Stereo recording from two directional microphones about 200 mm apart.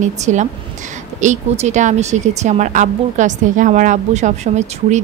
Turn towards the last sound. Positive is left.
turn(degrees=-35)  # may be behind; listen again after turning